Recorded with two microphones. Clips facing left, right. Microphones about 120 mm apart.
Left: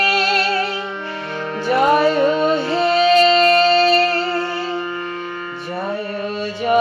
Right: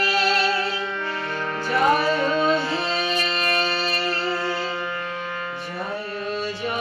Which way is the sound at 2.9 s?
65° left (ahead or behind).